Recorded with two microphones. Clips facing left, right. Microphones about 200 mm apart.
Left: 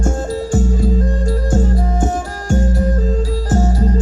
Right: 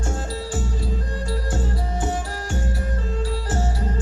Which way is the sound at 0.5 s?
45° left (ahead or behind).